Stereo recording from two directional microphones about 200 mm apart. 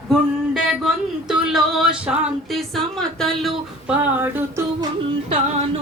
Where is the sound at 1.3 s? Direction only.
Centre (ahead or behind).